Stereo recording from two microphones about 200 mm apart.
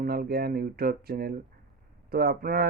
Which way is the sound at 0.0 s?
50° right (ahead or behind).